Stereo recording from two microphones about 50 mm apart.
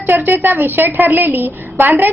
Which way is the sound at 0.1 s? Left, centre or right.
Right.